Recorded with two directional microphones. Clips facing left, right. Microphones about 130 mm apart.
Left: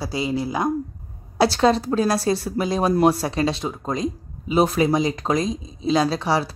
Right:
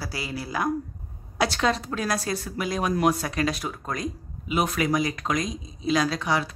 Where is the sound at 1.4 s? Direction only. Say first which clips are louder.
Left 7 dB; 35° left (ahead or behind).